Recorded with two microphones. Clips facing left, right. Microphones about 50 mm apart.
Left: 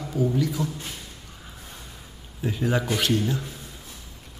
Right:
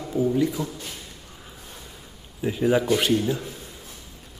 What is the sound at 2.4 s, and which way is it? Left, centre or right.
A man's voice, centre.